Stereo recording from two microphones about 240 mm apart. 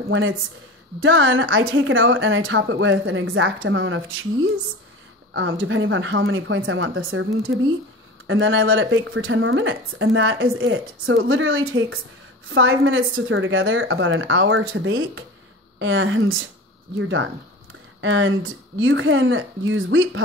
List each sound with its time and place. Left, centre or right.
1.0 s speech: right
18.0 s speech: right